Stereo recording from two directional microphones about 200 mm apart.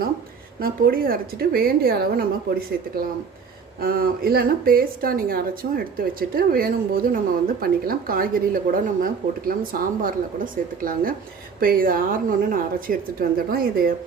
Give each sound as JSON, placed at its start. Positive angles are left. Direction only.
{"t": 0.6, "sound": "speech", "side_deg": -45}